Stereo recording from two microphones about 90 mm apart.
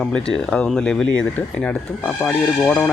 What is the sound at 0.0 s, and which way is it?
Speech, 10° left (ahead or behind).